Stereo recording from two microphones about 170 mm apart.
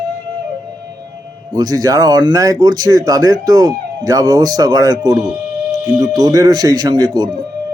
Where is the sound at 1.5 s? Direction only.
20° right (ahead or behind).